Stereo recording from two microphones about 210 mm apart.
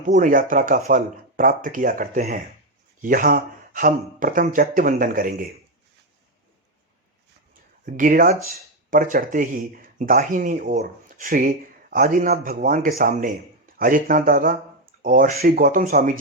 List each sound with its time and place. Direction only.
0.0 s speech: 40° right (ahead or behind)
7.9 s speech: 40° right (ahead or behind)